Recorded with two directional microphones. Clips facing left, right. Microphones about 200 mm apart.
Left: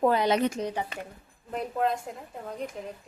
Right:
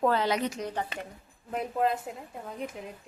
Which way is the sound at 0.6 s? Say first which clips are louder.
Left 4 dB; 30° left (ahead or behind).